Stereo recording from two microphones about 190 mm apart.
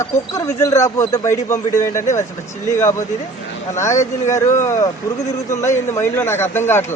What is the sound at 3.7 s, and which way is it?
Speech, 15° left (ahead or behind).